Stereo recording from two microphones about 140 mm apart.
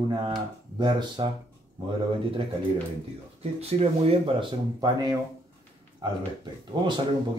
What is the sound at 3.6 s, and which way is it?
Speech, 45° right (ahead or behind).